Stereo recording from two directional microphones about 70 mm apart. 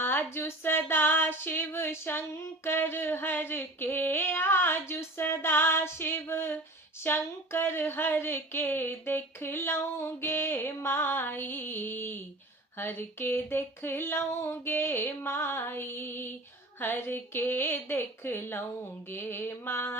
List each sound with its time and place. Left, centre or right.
0.0 s female singing: left
2.4 s speech: left